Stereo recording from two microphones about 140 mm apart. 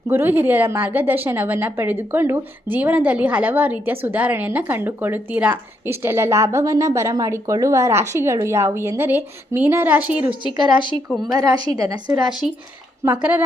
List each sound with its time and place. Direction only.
0.1 s a woman's voice: 15° right (ahead or behind)
10.6 s speech: 35° right (ahead or behind)
13.1 s a woman's voice: 10° right (ahead or behind)